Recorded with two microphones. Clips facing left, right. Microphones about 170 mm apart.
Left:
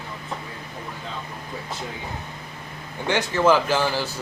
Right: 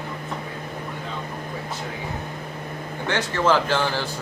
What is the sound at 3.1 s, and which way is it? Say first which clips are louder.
Speech: left 2 dB; 10° left (ahead or behind).